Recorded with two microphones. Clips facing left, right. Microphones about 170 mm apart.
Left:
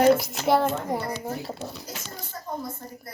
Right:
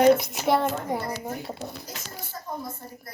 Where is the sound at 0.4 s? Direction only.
Centre (ahead or behind).